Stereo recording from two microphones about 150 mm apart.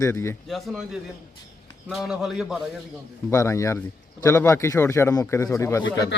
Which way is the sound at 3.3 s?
20° left (ahead or behind).